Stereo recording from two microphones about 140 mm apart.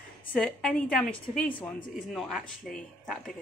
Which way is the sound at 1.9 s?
5° left (ahead or behind).